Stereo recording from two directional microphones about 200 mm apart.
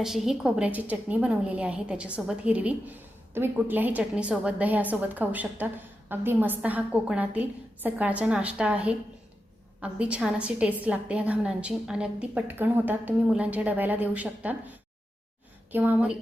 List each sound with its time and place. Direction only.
0.0 s a woman's voice: centre (ahead or behind)